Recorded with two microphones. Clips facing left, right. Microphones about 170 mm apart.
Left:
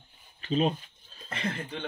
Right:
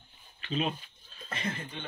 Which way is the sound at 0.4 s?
40° left (ahead or behind).